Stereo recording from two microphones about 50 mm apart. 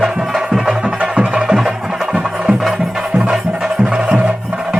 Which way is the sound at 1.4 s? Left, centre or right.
Centre.